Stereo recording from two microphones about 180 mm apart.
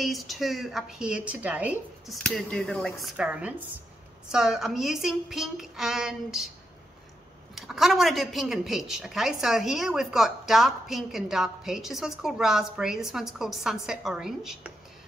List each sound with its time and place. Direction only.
0.0 s a woman's voice: centre (ahead or behind)
7.5 s a woman's voice: centre (ahead or behind)